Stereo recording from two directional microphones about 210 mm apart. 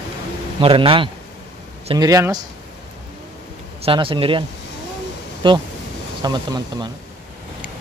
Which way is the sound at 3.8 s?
25° right (ahead or behind).